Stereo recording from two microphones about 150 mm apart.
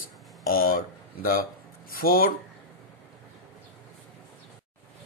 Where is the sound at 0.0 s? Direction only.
70° left (ahead or behind).